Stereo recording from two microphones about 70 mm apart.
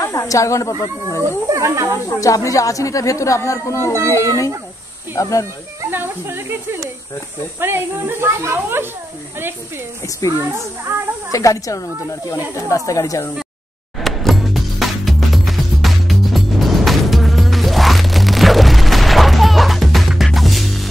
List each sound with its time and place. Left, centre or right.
0.3 s speech: left
1.5 s speech: right
2.0 s speech: left
5.9 s speech: right
10.2 s speech: left
14.0 s music: centre